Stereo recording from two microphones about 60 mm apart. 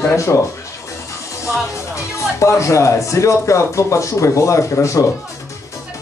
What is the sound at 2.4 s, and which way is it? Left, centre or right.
Speech, left.